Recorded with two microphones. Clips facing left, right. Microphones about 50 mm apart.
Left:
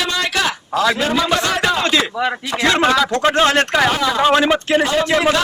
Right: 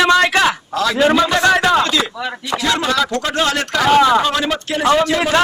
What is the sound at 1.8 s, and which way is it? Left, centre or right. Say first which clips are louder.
Speech: left 1 dB; left.